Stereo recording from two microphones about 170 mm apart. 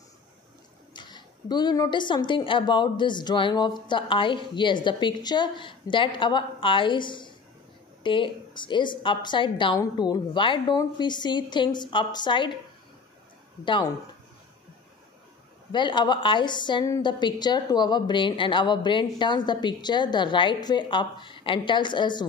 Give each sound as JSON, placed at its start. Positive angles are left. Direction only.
{"t": 0.9, "sound": "a woman's voice", "side_deg": 25}
{"t": 15.7, "sound": "a woman's voice", "side_deg": 25}